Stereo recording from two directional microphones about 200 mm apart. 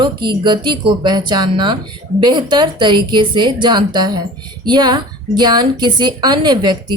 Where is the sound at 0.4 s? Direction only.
25° right (ahead or behind).